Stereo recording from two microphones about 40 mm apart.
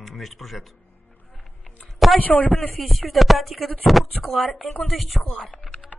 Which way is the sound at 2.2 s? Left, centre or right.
Left.